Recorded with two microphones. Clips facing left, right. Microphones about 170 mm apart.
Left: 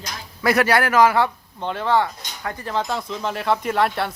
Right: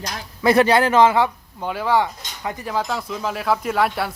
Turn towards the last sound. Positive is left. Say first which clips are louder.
# even
turn(degrees=-5)  # may be behind; listen again after turning